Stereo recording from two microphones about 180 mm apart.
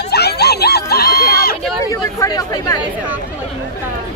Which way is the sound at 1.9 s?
20° left (ahead or behind).